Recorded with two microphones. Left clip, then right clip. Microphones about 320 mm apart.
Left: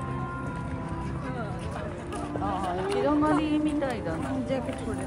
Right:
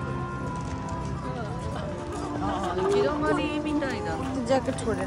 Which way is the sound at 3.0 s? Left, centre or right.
Left.